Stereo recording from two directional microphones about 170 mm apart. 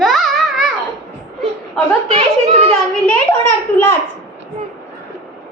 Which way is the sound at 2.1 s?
40° right (ahead or behind).